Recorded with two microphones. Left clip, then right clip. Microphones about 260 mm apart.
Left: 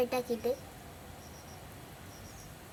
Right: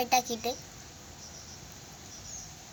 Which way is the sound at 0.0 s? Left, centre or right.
Centre.